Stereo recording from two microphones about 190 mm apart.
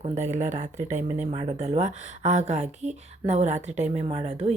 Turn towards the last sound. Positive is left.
turn(degrees=-35)  # may be behind; listen again after turning